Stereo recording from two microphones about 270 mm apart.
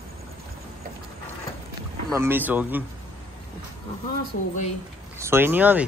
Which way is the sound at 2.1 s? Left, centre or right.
Centre.